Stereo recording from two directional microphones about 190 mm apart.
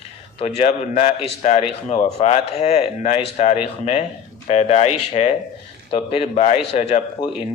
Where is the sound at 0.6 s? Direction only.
30° left (ahead or behind).